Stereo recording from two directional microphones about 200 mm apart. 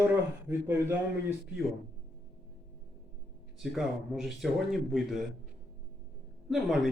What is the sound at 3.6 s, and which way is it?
Speech, centre (ahead or behind).